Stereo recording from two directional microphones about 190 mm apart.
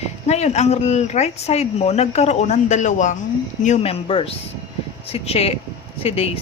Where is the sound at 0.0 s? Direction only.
35° left (ahead or behind).